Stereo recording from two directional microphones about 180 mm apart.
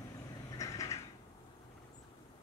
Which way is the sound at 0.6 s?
20° left (ahead or behind).